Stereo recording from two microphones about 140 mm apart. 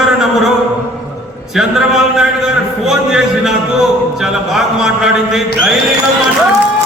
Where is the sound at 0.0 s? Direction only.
Centre (ahead or behind).